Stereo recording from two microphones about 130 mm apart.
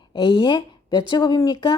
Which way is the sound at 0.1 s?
40° left (ahead or behind).